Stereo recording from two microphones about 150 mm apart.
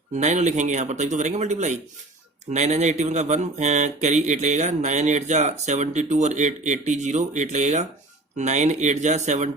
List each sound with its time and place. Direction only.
0.1 s speech: 50° right (ahead or behind)